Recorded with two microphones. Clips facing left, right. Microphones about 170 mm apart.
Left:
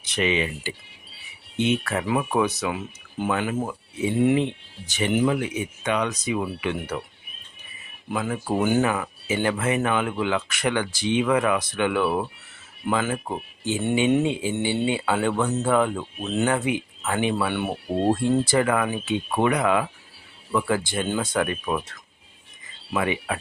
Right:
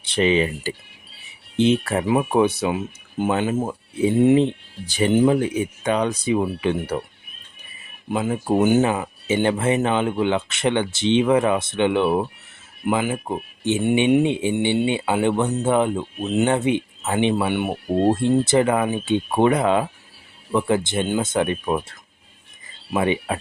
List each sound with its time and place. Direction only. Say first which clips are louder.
0.0 s speech: right 5 dB; 30° right (ahead or behind)
8.1 s speech: right 5 dB; 25° right (ahead or behind)
17.8 s speech: right 5 dB; 45° right (ahead or behind)
18.1 s speech: right 1 dB; 20° right (ahead or behind)